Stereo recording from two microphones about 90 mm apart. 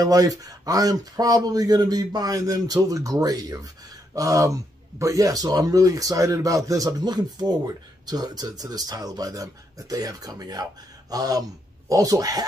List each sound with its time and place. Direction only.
0.0 s speech: 40° right (ahead or behind)